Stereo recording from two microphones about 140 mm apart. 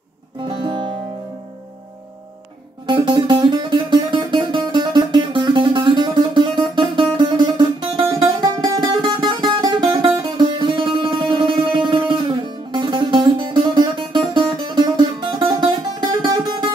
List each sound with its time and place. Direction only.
0.5 s music: 35° right (ahead or behind)
2.9 s music: 35° right (ahead or behind)